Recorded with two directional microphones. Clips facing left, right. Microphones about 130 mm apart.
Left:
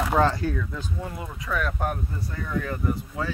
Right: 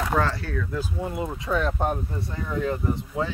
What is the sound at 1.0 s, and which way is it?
Speech, 25° right (ahead or behind).